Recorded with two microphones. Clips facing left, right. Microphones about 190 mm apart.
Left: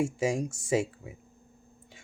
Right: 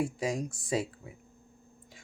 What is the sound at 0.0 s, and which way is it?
Speech, 25° left (ahead or behind).